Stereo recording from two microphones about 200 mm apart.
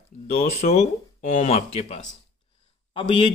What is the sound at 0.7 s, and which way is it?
Speech, 35° left (ahead or behind).